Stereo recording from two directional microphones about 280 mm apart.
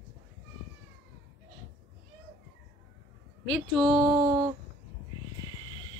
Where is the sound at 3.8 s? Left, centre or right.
Centre.